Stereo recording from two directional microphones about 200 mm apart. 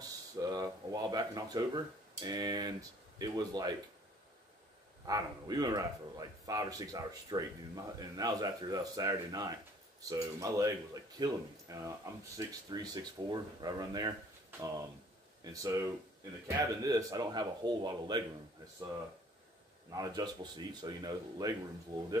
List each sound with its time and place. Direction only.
0.0 s speech: 20° right (ahead or behind)
5.0 s speech: 20° right (ahead or behind)
15.4 s speech: 15° right (ahead or behind)
19.9 s speech: 20° right (ahead or behind)